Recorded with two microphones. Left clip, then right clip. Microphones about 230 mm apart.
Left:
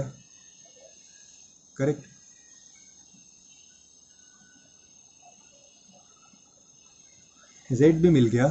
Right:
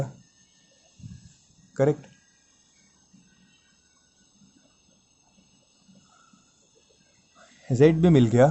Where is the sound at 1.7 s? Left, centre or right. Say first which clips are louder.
Right 4 dB; right.